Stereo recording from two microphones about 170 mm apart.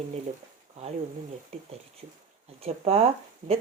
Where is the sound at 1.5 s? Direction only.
35° right (ahead or behind).